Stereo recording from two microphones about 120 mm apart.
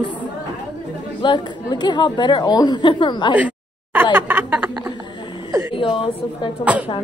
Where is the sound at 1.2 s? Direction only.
40° left (ahead or behind).